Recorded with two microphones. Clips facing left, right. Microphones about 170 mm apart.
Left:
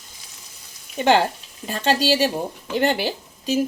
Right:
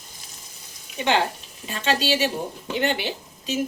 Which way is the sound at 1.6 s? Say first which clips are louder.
Left 4 dB; 40° left (ahead or behind).